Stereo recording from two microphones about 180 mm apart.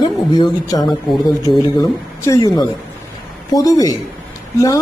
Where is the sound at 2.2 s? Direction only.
20° left (ahead or behind).